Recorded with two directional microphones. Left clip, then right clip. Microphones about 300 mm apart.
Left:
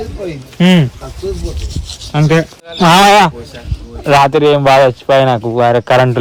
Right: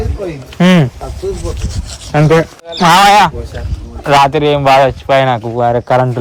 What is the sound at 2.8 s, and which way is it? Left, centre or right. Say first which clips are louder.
Speech: even; left.